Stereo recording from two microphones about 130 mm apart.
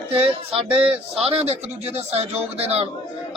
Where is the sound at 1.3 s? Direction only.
55° right (ahead or behind).